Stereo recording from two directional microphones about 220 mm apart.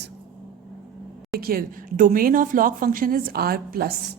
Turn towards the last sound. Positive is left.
turn(degrees=-45)  # may be behind; listen again after turning